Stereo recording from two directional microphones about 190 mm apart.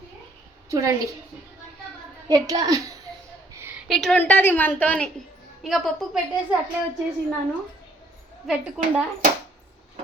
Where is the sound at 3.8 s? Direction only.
Centre (ahead or behind).